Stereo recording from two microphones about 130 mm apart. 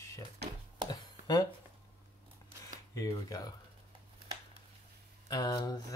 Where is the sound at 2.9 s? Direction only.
25° left (ahead or behind).